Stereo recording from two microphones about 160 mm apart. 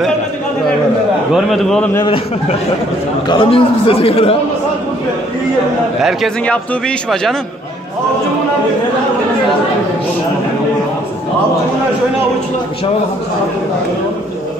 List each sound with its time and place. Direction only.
1.3 s a man's voice: centre (ahead or behind)
2.0 s a man's voice: 35° left (ahead or behind)
6.0 s a man's voice: 5° left (ahead or behind)